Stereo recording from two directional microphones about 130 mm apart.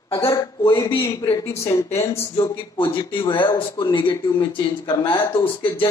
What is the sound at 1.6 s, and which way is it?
Speech, 20° left (ahead or behind).